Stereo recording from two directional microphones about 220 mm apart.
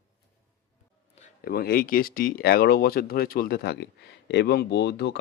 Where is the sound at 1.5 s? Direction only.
45° left (ahead or behind).